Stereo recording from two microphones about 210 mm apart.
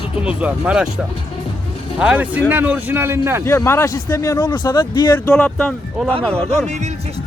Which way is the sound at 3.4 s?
10° left (ahead or behind).